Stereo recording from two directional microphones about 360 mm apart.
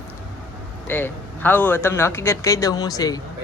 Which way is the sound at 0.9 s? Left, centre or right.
Centre.